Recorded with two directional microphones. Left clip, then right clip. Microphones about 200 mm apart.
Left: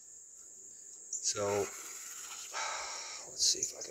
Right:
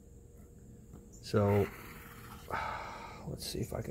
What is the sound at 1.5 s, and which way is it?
Speech, 25° left (ahead or behind).